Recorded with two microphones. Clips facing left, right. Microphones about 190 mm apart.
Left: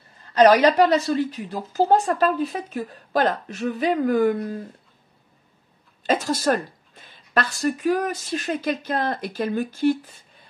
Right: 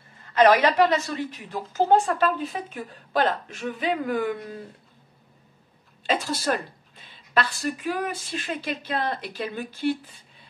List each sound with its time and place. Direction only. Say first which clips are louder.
0.3 s a woman's voice: left 3 dB; 35° left (ahead or behind)
6.0 s a woman's voice: left 4 dB; 45° left (ahead or behind)